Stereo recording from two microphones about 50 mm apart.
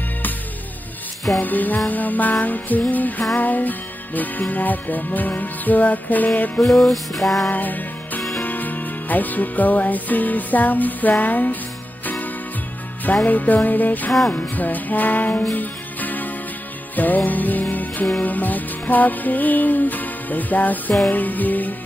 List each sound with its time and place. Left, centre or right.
1.4 s music: left
6.6 s music: centre
7.4 s music: left
13.0 s music: left